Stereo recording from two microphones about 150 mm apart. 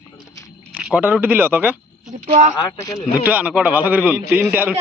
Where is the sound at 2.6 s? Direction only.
25° left (ahead or behind).